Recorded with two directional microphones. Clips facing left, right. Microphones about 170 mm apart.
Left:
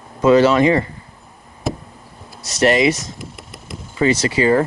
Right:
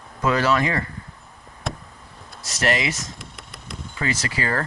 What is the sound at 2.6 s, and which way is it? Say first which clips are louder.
Speech: left 9 dB; 20° left (ahead or behind).